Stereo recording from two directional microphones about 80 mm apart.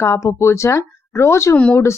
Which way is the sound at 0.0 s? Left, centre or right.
Left.